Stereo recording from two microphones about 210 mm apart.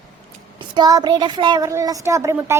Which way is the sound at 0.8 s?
20° right (ahead or behind).